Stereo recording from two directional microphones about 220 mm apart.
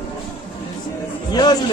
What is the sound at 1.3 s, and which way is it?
Speech, 20° left (ahead or behind).